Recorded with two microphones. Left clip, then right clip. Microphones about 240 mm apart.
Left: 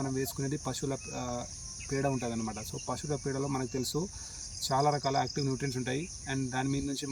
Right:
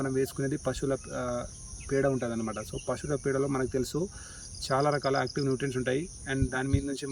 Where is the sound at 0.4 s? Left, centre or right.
Centre.